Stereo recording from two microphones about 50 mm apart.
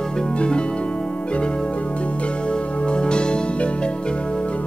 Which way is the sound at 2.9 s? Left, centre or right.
Centre.